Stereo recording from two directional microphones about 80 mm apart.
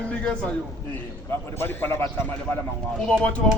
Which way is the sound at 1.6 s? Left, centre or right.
Left.